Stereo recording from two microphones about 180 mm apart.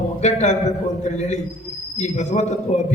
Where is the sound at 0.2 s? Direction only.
40° left (ahead or behind).